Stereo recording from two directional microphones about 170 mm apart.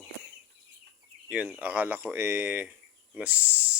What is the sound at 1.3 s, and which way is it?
Speech, 5° right (ahead or behind).